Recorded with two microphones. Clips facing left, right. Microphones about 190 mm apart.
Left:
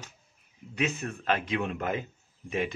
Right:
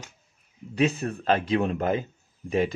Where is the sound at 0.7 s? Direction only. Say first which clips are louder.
Right 7 dB; 35° right (ahead or behind).